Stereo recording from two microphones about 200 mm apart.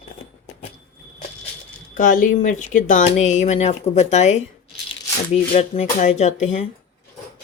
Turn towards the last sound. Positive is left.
turn(degrees=35)  # may be behind; listen again after turning